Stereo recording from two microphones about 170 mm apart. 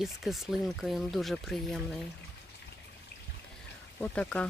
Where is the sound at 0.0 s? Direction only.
Centre (ahead or behind).